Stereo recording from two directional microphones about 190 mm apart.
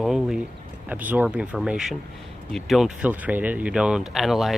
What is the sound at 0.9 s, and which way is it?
Speech, 10° right (ahead or behind).